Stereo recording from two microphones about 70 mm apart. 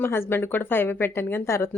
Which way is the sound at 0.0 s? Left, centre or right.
Left.